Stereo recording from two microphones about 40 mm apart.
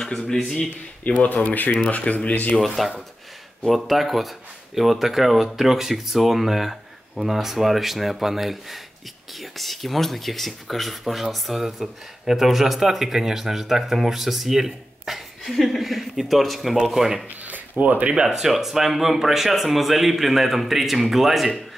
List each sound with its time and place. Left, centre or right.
1.0 s speech: left
2.5 s speech: centre
17.4 s a sound: right
18.2 s speech: centre